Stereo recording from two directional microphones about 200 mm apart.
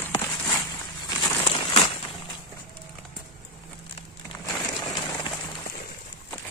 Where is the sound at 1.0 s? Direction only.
15° left (ahead or behind).